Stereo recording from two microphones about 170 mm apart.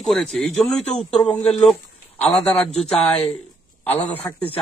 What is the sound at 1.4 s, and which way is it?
Speech, 40° left (ahead or behind).